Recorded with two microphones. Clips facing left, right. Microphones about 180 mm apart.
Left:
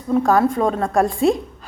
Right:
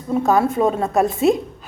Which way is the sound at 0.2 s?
25° right (ahead or behind).